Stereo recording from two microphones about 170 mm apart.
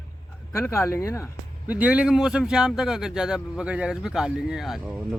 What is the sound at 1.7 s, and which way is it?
Speech, 10° right (ahead or behind).